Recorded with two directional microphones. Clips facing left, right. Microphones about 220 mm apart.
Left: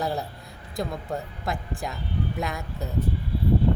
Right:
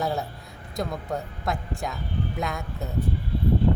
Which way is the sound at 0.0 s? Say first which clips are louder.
Right 1 dB; centre (ahead or behind).